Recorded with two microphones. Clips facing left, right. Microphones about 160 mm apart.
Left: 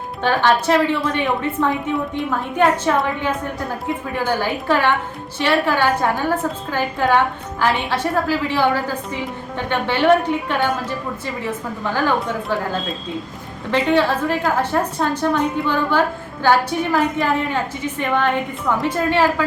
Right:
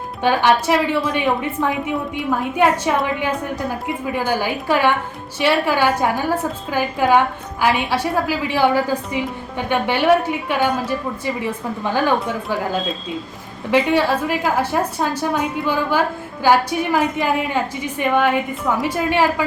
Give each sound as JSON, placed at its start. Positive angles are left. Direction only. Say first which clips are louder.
{"t": 0.2, "sound": "a woman's voice", "louder": "right 1 dB", "side_deg": -10}
{"t": 2.6, "sound": "a woman's voice", "louder": "left 1 dB", "side_deg": -15}
{"t": 13.7, "sound": "a woman's voice", "louder": "right 1 dB", "side_deg": -10}